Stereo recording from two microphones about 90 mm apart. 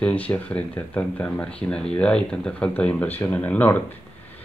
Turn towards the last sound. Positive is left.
turn(degrees=20)  # may be behind; listen again after turning